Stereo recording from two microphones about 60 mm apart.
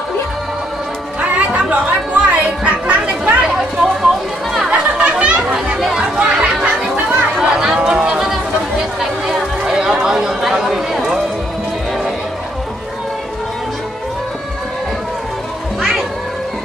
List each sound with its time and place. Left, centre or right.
1.2 s music: right
2.3 s chatter: right
3.5 s a sound: centre
4.6 s chatter: right
5.9 s children playing: centre
7.3 s chatter: centre
15.8 s music: centre